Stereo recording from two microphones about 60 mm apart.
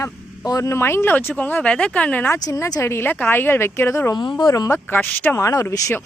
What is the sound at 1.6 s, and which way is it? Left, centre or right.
Speech, centre.